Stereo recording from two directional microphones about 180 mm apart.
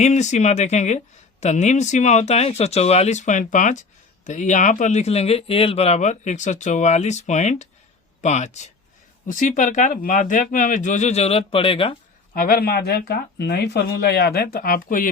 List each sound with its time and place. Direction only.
0.0 s speech: 40° left (ahead or behind)
12.3 s speech: 55° left (ahead or behind)